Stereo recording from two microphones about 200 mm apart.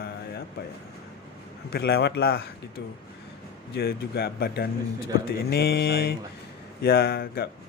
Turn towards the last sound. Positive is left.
turn(degrees=50)  # may be behind; listen again after turning